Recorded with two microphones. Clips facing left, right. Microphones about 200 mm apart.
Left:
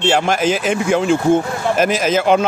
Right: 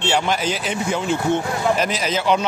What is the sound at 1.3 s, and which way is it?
Speech, 50° left (ahead or behind).